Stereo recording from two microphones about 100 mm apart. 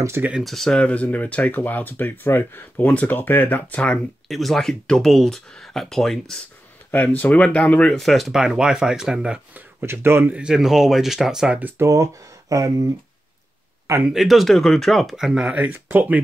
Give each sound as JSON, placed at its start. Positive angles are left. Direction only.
{"t": 0.0, "sound": "speech", "side_deg": -25}
{"t": 0.3, "sound": "speech", "side_deg": 0}
{"t": 4.3, "sound": "speech", "side_deg": 0}
{"t": 6.9, "sound": "speech", "side_deg": 20}
{"t": 8.0, "sound": "speech", "side_deg": 0}
{"t": 10.3, "sound": "speech", "side_deg": -5}
{"t": 11.8, "sound": "speech", "side_deg": -30}
{"t": 14.0, "sound": "speech", "side_deg": 0}